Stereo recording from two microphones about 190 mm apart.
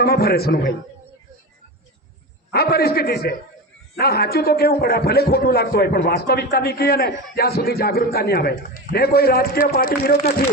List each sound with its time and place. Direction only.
0.0 s a man's voice: 55° left (ahead or behind)
2.5 s a man's voice: 55° left (ahead or behind)